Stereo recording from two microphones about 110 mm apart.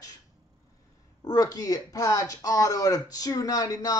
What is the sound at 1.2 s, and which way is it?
Speech, 35° left (ahead or behind).